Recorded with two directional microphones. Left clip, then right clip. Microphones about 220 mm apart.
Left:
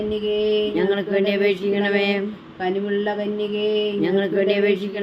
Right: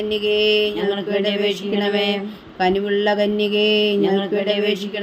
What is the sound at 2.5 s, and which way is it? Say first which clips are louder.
Speech: right 5 dB; 40° right (ahead or behind).